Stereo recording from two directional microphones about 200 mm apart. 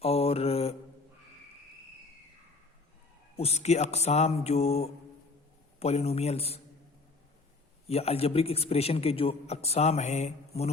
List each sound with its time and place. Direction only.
0.0 s mantra: 30° left (ahead or behind)
3.3 s a man's voice: 30° left (ahead or behind)
7.9 s a man's voice: 30° left (ahead or behind)